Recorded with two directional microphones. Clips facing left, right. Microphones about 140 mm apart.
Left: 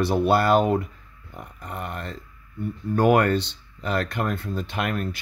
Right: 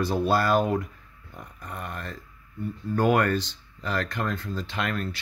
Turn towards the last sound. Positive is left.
turn(degrees=50)  # may be behind; listen again after turning